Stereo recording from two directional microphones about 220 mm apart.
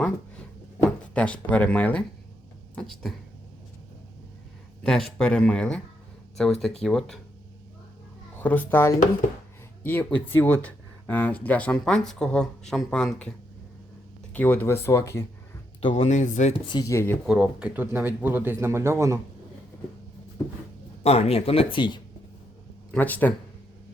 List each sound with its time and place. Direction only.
0.0 s a sound: 5° left (ahead or behind)
1.4 s speech: 5° left (ahead or behind)
4.8 s speech: centre (ahead or behind)
8.4 s speech: 10° left (ahead or behind)
14.3 s speech: 10° left (ahead or behind)
15.8 s speech: 25° left (ahead or behind)
16.9 s speech: 10° left (ahead or behind)
17.2 s speech: 5° right (ahead or behind)
21.0 s speech: 30° left (ahead or behind)
22.9 s speech: 5° left (ahead or behind)